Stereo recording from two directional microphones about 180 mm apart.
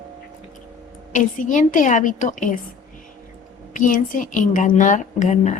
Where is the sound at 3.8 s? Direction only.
50° left (ahead or behind).